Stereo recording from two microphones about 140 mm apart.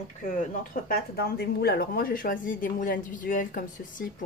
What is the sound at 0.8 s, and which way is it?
Speech, 90° left.